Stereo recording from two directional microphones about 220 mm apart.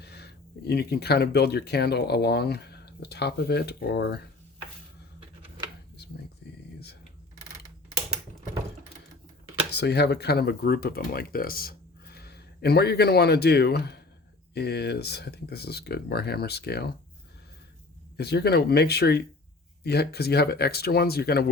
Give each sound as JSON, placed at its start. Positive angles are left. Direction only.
{"t": 0.0, "sound": "speech", "side_deg": 50}
{"t": 9.7, "sound": "speech", "side_deg": 50}
{"t": 18.2, "sound": "speech", "side_deg": 50}